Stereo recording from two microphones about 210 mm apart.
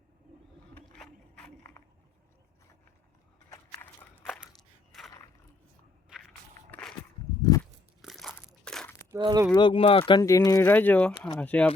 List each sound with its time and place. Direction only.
0.7 s a sound: 5° left (ahead or behind)
3.5 s a sound: 10° left (ahead or behind)
4.9 s a sound: centre (ahead or behind)
6.1 s walk: centre (ahead or behind)
7.4 s crunch: 15° left (ahead or behind)
8.0 s crunch: centre (ahead or behind)
8.6 s crumpling: 5° left (ahead or behind)
9.1 s speech: 20° right (ahead or behind)
9.6 s speech: 25° left (ahead or behind); by 11.7 s 5° left (ahead or behind)